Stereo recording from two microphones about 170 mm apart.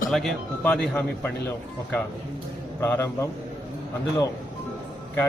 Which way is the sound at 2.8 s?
15° left (ahead or behind).